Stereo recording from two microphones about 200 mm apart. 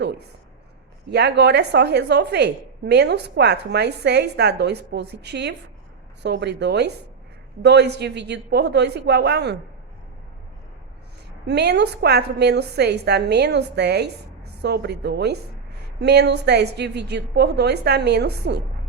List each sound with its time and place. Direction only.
1.0 s a woman's voice: 55° right (ahead or behind)
11.4 s a woman's voice: 55° right (ahead or behind)